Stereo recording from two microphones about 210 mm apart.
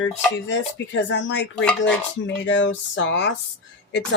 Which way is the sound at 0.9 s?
60° left (ahead or behind).